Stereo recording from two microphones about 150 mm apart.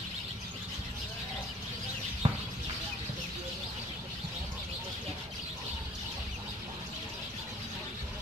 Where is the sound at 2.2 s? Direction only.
35° right (ahead or behind).